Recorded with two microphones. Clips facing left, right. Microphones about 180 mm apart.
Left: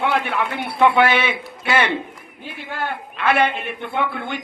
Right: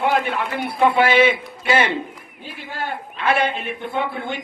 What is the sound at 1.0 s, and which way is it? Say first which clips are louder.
A woman's voice: right 2 dB; 65° left (ahead or behind).